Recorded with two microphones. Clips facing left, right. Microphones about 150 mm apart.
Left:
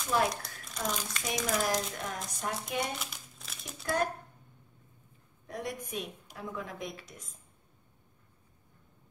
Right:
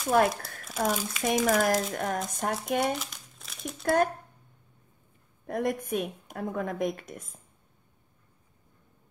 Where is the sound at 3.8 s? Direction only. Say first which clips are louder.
Right 7 dB; 50° right (ahead or behind).